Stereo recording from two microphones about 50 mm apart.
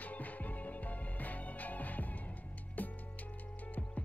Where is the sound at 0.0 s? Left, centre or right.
Left.